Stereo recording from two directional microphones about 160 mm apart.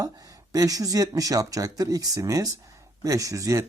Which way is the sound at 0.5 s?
20° right (ahead or behind).